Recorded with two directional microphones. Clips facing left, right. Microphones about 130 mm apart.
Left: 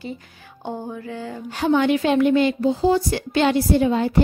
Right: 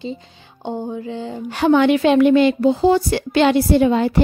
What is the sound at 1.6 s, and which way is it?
Speech, 75° right (ahead or behind).